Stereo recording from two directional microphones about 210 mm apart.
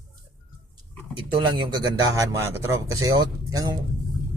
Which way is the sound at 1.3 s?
20° right (ahead or behind).